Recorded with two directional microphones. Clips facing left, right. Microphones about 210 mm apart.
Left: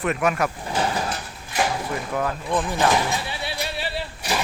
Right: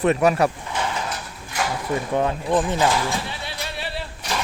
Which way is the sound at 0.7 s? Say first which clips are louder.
Left 2 dB; 35° left (ahead or behind).